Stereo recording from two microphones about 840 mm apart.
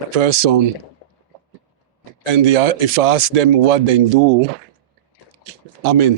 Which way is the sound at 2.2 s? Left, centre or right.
Right.